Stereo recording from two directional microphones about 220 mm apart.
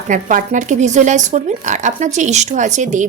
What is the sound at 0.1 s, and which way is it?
Speech, 35° right (ahead or behind).